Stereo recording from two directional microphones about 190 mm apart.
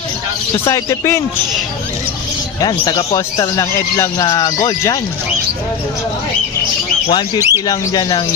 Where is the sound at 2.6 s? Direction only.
20° left (ahead or behind).